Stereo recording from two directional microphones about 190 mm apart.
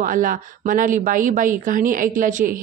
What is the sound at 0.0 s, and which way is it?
Speech, 45° right (ahead or behind).